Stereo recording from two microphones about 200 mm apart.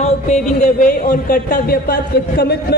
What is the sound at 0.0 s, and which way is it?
A man's voice, 35° left (ahead or behind).